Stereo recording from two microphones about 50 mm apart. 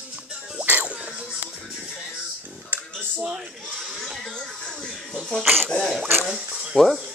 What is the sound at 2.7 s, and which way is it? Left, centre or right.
Music, right.